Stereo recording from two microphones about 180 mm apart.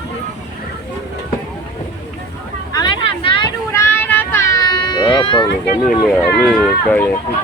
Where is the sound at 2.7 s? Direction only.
25° left (ahead or behind).